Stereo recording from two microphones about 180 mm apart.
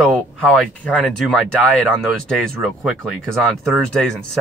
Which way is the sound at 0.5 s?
5° left (ahead or behind).